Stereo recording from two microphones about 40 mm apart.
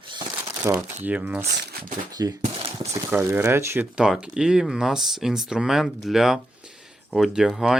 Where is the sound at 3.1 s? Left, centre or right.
Right.